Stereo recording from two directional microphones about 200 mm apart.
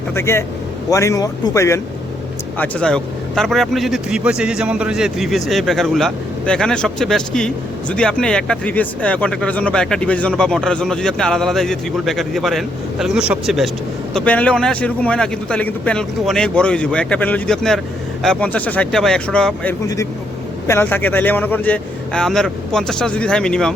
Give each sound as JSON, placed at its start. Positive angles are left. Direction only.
{"t": 0.1, "sound": "a man's voice", "side_deg": 10}